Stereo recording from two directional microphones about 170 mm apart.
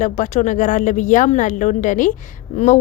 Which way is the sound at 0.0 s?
45° left (ahead or behind).